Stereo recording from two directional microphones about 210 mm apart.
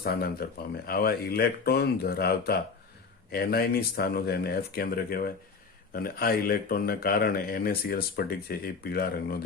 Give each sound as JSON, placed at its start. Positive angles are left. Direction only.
{"t": 0.0, "sound": "speech", "side_deg": 45}